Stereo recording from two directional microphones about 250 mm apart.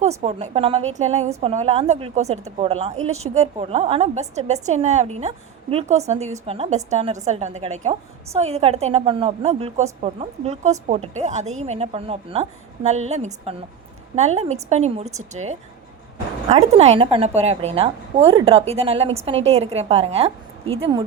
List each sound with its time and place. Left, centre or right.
0.2 s a woman's voice: right